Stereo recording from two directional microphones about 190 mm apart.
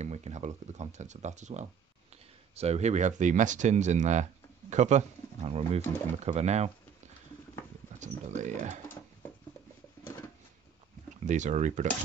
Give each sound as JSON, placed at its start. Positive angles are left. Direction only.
{"t": 0.0, "sound": "speech", "side_deg": -35}
{"t": 8.0, "sound": "speech", "side_deg": -40}
{"t": 11.2, "sound": "speech", "side_deg": -40}